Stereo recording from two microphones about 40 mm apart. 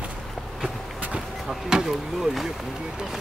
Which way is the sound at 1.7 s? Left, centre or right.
Centre.